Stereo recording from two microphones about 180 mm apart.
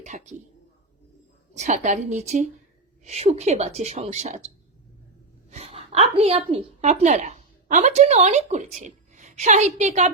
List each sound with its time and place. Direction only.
0.0 s a woman's voice: 40° right (ahead or behind)
1.5 s a woman's voice: 45° right (ahead or behind)